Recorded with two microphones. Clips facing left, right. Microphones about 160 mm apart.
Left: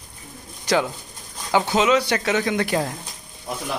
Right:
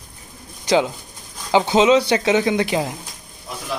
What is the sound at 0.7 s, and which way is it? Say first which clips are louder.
Speech: right 3 dB; 20° right (ahead or behind).